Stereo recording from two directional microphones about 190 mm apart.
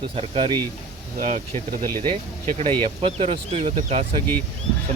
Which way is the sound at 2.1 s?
25° right (ahead or behind).